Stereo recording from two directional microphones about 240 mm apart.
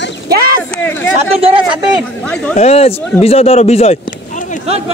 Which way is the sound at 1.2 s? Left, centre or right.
Right.